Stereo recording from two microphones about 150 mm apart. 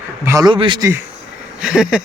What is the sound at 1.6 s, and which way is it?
Speech, 5° right (ahead or behind).